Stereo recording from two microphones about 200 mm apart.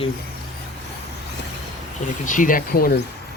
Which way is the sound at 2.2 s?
40° left (ahead or behind).